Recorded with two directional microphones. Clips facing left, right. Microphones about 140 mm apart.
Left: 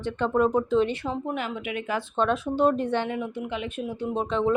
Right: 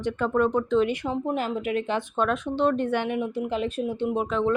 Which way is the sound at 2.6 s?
10° left (ahead or behind).